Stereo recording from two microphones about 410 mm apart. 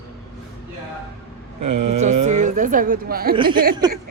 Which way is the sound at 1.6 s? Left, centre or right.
Right.